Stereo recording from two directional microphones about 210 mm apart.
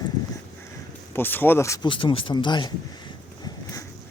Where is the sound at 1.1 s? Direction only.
10° left (ahead or behind).